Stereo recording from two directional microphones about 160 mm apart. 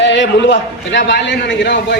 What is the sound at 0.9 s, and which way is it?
A man's voice, 90° left.